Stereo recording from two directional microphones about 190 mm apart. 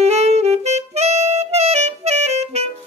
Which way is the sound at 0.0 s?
35° right (ahead or behind).